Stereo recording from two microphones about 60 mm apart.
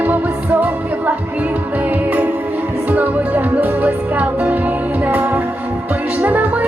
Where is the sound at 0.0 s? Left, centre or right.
Right.